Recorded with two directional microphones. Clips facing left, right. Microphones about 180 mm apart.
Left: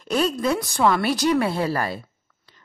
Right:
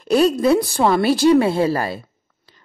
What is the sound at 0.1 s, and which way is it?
A woman's voice, 35° right (ahead or behind).